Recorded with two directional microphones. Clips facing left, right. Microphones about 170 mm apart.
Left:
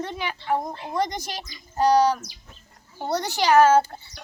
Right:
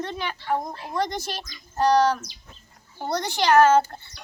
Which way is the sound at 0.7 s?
25° left (ahead or behind).